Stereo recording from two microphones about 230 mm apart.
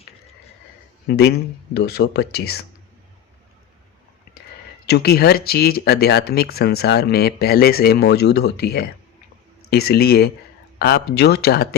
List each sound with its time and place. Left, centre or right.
1.0 s speech: left
4.9 s speech: left